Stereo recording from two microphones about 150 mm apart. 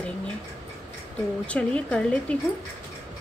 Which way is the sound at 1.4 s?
10° left (ahead or behind).